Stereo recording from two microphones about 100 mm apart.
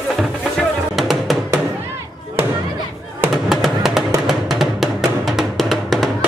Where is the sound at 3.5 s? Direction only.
Centre (ahead or behind).